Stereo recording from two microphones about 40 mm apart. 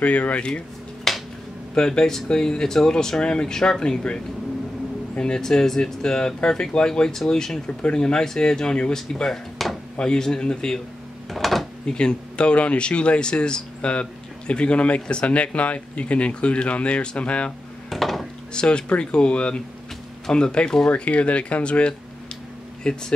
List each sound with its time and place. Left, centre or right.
0.0 s speech: left
1.1 s a sound: centre
1.8 s speech: centre
5.1 s speech: centre
9.6 s speech: centre
9.9 s speech: centre
11.2 s drawer open or close: centre
11.8 s speech: left
17.8 s a sound: centre
18.5 s speech: left
20.9 s speech: left